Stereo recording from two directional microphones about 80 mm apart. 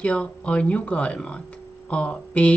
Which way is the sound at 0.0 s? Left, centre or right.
Centre.